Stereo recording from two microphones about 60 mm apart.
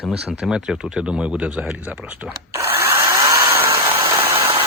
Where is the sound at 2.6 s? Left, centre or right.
Right.